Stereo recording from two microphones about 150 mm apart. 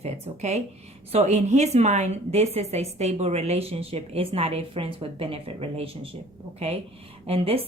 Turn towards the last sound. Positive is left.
turn(degrees=-40)  # may be behind; listen again after turning